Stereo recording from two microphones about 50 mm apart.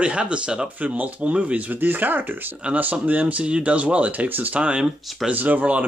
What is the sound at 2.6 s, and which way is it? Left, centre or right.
Speech, right.